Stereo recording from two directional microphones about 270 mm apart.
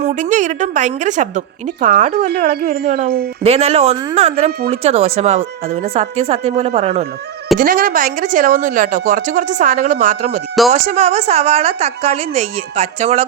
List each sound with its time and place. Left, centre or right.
0.0 s a woman's voice: right